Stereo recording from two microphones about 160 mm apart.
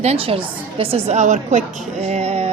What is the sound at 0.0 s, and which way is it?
A woman's voice, 40° right (ahead or behind).